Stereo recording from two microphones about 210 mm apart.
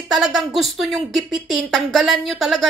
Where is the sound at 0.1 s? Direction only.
Centre (ahead or behind).